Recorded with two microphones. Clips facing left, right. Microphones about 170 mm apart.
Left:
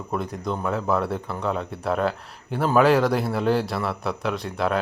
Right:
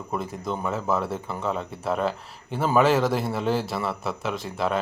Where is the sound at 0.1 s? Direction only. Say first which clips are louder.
Left 2 dB; centre (ahead or behind).